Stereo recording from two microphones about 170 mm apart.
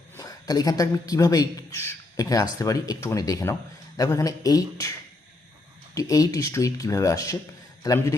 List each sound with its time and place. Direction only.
0.2 s a man's voice: 20° left (ahead or behind)
5.9 s a man's voice: 20° left (ahead or behind)